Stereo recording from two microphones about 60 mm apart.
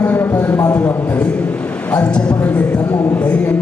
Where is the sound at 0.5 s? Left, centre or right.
Left.